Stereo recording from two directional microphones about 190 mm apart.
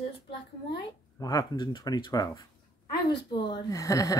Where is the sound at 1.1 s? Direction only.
20° left (ahead or behind).